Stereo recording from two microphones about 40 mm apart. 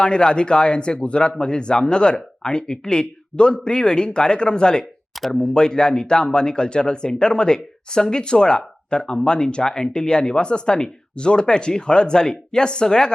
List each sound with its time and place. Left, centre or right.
0.0 s speech: left